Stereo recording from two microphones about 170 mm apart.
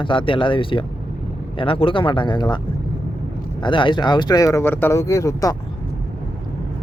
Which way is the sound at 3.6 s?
30° left (ahead or behind).